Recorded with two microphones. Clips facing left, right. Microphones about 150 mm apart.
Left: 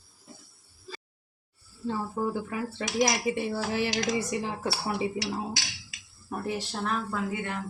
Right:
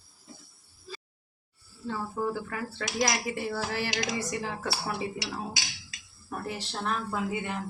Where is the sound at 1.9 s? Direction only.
20° left (ahead or behind).